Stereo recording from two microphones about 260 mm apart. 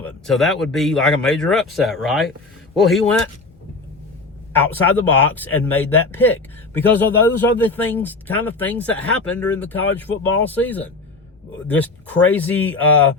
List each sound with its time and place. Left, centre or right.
0.0 s speech: centre
4.5 s a man's voice: centre